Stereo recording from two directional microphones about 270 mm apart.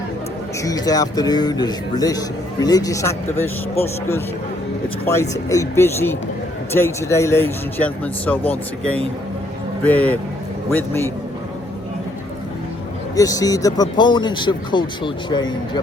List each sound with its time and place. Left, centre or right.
0.6 s a man's voice: centre
13.1 s a man's voice: centre